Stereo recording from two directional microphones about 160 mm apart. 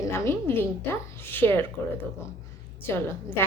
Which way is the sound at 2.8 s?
15° left (ahead or behind).